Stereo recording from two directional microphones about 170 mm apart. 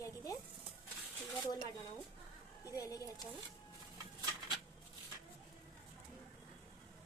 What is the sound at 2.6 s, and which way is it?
Speech, 20° left (ahead or behind).